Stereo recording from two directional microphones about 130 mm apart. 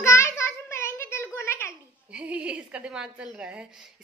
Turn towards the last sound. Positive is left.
turn(degrees=-10)  # may be behind; listen again after turning